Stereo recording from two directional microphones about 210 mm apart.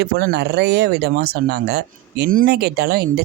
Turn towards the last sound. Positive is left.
turn(degrees=-50)  # may be behind; listen again after turning